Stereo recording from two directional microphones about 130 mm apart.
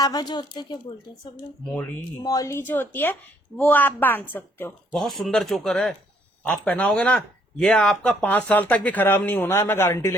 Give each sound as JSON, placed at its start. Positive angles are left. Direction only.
{"t": 0.0, "sound": "speech", "side_deg": 30}
{"t": 2.2, "sound": "speech", "side_deg": 30}
{"t": 2.6, "sound": "speech", "side_deg": 15}
{"t": 4.9, "sound": "speech", "side_deg": 0}